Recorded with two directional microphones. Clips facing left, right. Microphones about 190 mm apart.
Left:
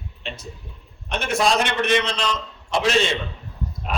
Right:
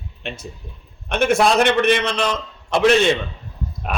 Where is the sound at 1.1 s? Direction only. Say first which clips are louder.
Right 5 dB; 55° right (ahead or behind).